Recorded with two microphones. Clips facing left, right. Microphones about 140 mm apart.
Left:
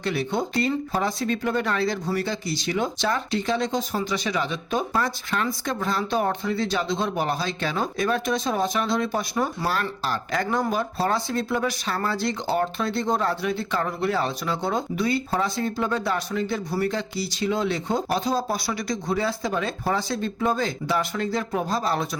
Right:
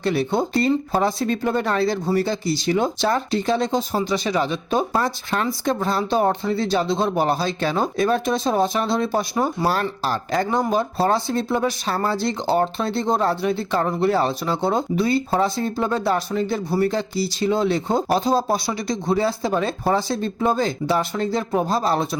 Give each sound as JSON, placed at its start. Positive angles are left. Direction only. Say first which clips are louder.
{"t": 0.0, "sound": "speech", "louder": "right 5 dB", "side_deg": -35}